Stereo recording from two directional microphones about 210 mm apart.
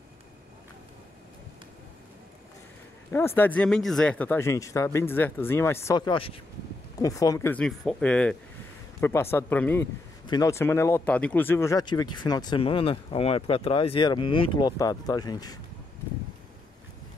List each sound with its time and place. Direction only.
3.1 s speech: 10° left (ahead or behind)